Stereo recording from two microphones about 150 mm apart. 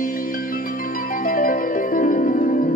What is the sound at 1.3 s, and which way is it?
Music, 65° left (ahead or behind).